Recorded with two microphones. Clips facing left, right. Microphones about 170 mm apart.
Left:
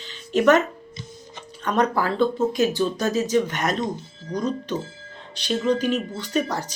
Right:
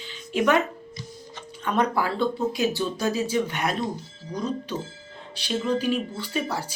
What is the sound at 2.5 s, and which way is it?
Speech, 10° right (ahead or behind).